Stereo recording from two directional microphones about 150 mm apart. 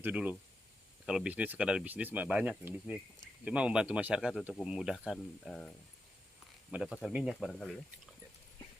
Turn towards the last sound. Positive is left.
turn(degrees=0)  # may be behind; listen again after turning